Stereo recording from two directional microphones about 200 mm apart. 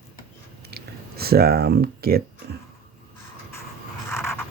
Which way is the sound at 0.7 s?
50° right (ahead or behind).